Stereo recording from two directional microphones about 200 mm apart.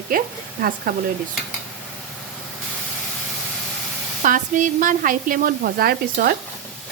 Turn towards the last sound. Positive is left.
turn(degrees=-50)  # may be behind; listen again after turning